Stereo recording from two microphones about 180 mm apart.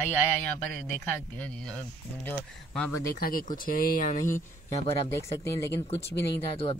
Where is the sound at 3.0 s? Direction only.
55° left (ahead or behind).